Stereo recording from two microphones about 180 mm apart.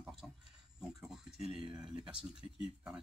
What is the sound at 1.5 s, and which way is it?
Speech, 25° right (ahead or behind).